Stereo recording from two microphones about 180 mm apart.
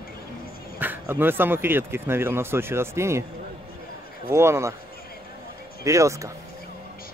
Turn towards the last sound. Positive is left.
turn(degrees=-15)  # may be behind; listen again after turning